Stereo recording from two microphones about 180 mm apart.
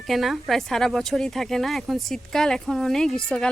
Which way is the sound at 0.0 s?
Centre (ahead or behind).